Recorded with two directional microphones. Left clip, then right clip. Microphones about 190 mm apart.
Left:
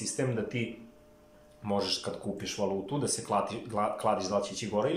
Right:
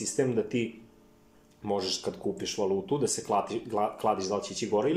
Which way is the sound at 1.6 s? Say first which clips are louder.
Right 1 dB; 35° right (ahead or behind).